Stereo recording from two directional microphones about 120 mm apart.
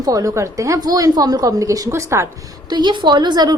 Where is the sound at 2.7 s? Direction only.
40° right (ahead or behind).